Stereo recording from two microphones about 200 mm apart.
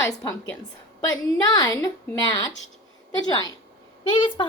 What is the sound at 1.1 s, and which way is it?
A woman's voice, 20° left (ahead or behind).